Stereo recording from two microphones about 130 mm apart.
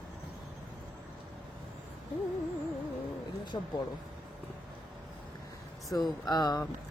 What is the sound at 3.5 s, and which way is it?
Speech, 35° left (ahead or behind).